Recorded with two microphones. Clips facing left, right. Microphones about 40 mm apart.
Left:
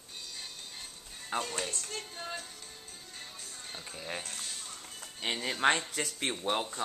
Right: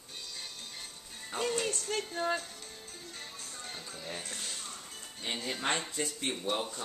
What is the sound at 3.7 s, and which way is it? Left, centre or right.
Speech, centre.